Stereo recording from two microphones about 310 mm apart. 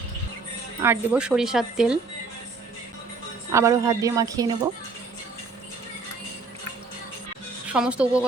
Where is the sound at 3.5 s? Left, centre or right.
Centre.